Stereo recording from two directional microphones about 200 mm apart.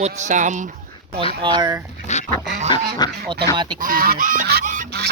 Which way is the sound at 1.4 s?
20° right (ahead or behind).